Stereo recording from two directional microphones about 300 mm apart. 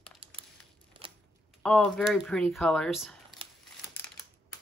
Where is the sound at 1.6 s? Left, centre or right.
Centre.